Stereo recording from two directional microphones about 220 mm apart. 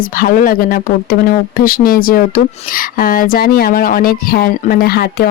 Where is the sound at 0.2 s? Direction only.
40° left (ahead or behind).